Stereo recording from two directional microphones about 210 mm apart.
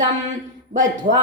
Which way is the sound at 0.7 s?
35° right (ahead or behind).